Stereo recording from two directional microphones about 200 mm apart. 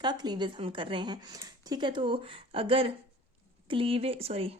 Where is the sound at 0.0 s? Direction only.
20° right (ahead or behind).